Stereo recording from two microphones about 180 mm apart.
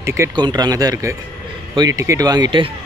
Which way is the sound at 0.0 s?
15° right (ahead or behind).